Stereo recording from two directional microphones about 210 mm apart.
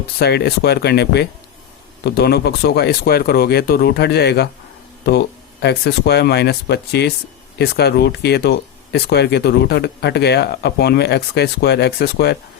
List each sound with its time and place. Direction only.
0.2 s speech: 50° left (ahead or behind)